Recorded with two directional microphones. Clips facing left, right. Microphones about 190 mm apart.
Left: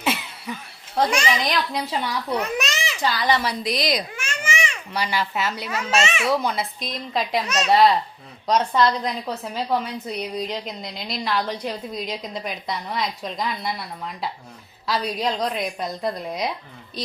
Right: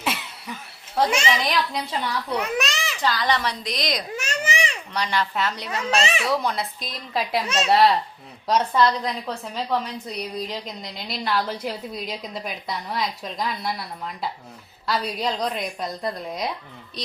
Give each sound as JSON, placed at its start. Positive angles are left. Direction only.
{"t": 0.0, "sound": "cough", "side_deg": 0}
{"t": 1.4, "sound": "a woman's voice", "side_deg": 0}
{"t": 2.4, "sound": "babbling", "side_deg": 0}
{"t": 3.0, "sound": "a woman's voice", "side_deg": 10}
{"t": 4.1, "sound": "baby cry", "side_deg": -40}
{"t": 4.9, "sound": "a woman's voice", "side_deg": 5}
{"t": 6.0, "sound": "a child's voice", "side_deg": -35}
{"t": 6.2, "sound": "a woman's voice", "side_deg": 0}
{"t": 7.4, "sound": "a woman's voice", "side_deg": -30}
{"t": 7.7, "sound": "a woman's voice", "side_deg": 0}